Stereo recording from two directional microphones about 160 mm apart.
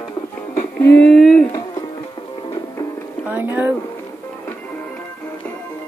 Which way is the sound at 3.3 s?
10° right (ahead or behind).